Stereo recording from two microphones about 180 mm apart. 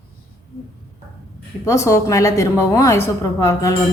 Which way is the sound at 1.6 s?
15° left (ahead or behind).